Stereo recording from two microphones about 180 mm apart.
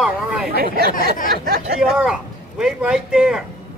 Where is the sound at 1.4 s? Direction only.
60° right (ahead or behind).